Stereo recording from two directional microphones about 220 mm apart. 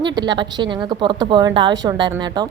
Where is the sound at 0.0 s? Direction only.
20° right (ahead or behind).